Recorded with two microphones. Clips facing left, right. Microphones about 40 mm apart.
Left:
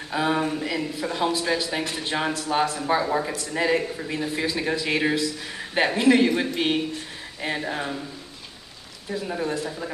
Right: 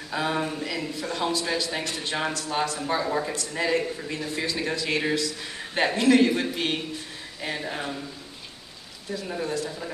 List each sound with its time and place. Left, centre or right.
0.1 s a man's voice: centre
9.1 s a man's voice: centre